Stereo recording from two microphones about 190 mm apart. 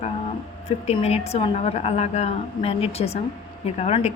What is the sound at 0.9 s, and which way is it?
A woman's voice, 35° left (ahead or behind).